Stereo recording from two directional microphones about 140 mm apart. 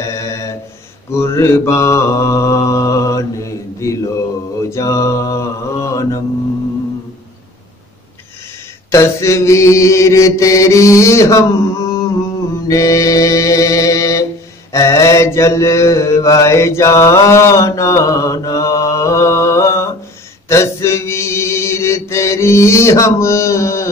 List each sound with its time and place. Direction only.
0.0 s a sound: 20° left (ahead or behind)
1.1 s mantra: 20° left (ahead or behind)
8.9 s mantra: 20° left (ahead or behind)
12.6 s music: 25° left (ahead or behind)
14.7 s mantra: 20° left (ahead or behind)
20.4 s chant: 20° left (ahead or behind)